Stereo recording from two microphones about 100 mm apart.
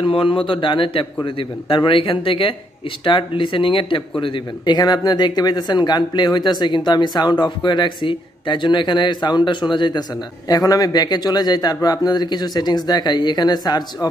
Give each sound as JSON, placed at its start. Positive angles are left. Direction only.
{"t": 0.0, "sound": "speech", "side_deg": 60}
{"t": 4.7, "sound": "speech", "side_deg": 45}
{"t": 10.5, "sound": "speech", "side_deg": 40}